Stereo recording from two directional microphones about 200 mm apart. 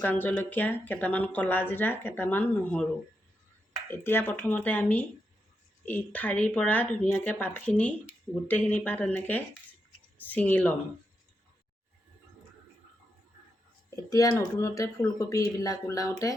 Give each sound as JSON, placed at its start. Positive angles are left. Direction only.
{"t": 0.0, "sound": "speech", "side_deg": 10}
{"t": 3.8, "sound": "speech", "side_deg": 10}
{"t": 13.9, "sound": "speech", "side_deg": 15}